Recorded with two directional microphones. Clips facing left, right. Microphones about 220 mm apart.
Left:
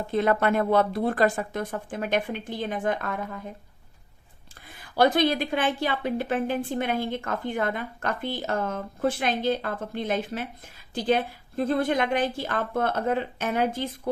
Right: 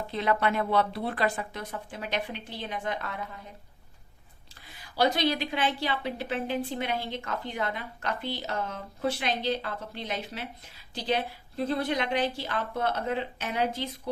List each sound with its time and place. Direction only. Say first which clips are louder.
0.1 s a woman's voice: left 5 dB; 50° left (ahead or behind)
4.7 s a woman's voice: left 5 dB; 55° left (ahead or behind)